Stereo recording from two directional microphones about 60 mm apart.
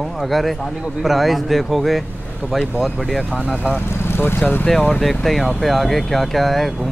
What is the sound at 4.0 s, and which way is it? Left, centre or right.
Vehicle, left.